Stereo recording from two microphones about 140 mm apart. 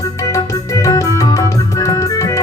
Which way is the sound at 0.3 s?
25° left (ahead or behind).